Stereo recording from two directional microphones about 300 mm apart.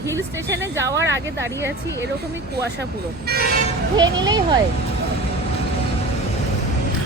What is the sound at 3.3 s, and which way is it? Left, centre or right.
Speech, right.